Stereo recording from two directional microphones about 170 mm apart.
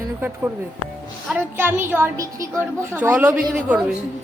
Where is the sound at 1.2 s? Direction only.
10° right (ahead or behind).